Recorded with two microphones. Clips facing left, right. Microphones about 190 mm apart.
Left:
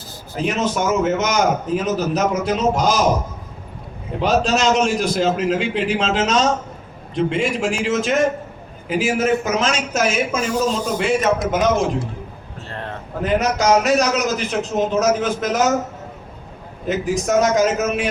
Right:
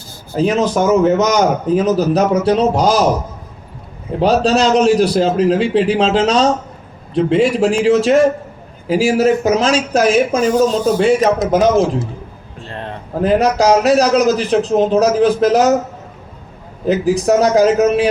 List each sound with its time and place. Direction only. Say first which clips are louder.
0.3 s a man's voice: right 6 dB; 35° right (ahead or behind)
4.2 s a man's voice: right 5 dB; 35° right (ahead or behind)
13.2 s a man's voice: right 5 dB; 35° right (ahead or behind)
16.8 s a man's voice: right 7 dB; 35° right (ahead or behind)